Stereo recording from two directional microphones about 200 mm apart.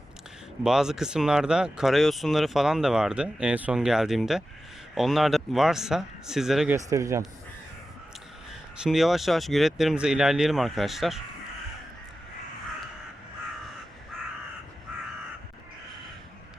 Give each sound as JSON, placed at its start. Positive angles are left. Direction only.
{"t": 0.6, "sound": "speech", "side_deg": -5}
{"t": 6.7, "sound": "a man's voice", "side_deg": -15}
{"t": 8.8, "sound": "speech", "side_deg": 0}